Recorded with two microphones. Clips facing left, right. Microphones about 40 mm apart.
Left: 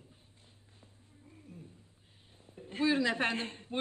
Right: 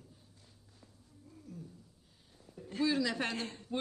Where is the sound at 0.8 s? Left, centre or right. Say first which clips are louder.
Right 1 dB; left.